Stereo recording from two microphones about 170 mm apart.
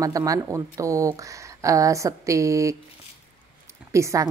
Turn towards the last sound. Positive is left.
turn(degrees=-15)  # may be behind; listen again after turning